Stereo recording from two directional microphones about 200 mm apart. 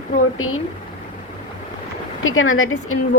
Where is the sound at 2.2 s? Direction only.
90° left.